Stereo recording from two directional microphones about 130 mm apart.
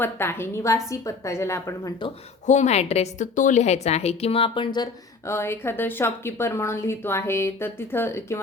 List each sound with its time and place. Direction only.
0.0 s a woman's voice: 20° left (ahead or behind)
2.5 s a woman's voice: 60° left (ahead or behind)
3.3 s speech: 75° left (ahead or behind); by 5.3 s 35° left (ahead or behind)
5.3 s a woman's voice: 20° left (ahead or behind)